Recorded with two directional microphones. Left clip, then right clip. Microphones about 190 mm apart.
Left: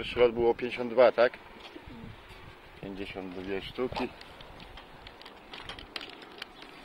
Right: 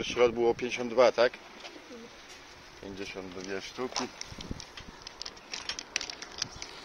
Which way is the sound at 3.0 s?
15° left (ahead or behind).